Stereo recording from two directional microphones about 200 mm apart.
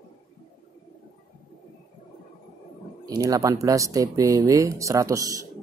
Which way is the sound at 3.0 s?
15° right (ahead or behind).